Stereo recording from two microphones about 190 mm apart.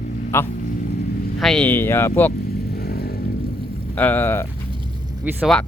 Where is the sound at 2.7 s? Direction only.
55° left (ahead or behind).